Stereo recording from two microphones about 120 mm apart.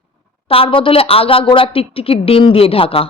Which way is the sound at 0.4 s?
50° left (ahead or behind).